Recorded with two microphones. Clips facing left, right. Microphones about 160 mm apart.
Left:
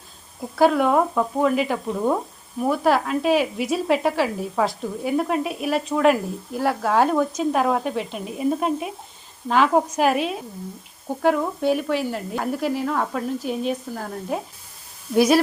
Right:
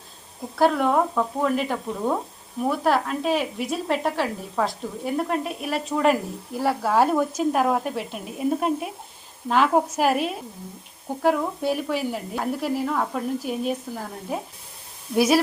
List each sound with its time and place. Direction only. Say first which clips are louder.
0.6 s speech: left 2 dB; 5° left (ahead or behind)